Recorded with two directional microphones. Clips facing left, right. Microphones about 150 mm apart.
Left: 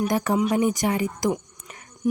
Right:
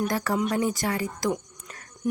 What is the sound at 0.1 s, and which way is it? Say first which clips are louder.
A woman's voice: left 4 dB; 15° left (ahead or behind).